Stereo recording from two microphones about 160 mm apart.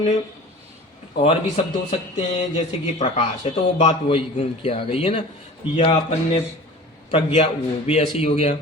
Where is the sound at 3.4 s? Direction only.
40° left (ahead or behind).